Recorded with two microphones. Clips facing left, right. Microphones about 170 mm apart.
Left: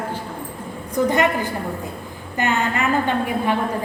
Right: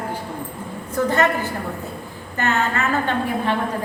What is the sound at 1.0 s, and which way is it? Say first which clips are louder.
A woman's voice: left 1 dB; 15° left (ahead or behind).